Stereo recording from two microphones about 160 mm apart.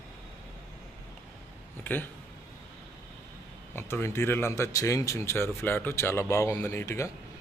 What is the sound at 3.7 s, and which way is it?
Speech, 15° left (ahead or behind).